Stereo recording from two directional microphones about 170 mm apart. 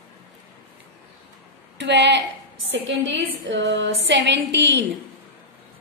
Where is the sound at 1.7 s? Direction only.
90° right.